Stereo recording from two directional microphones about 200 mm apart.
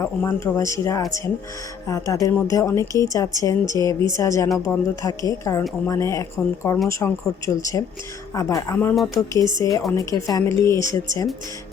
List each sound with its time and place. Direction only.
0.0 s a woman's voice: 10° left (ahead or behind)